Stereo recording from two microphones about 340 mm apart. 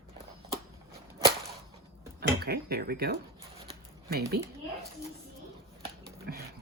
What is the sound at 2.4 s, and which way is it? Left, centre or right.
Speech, right.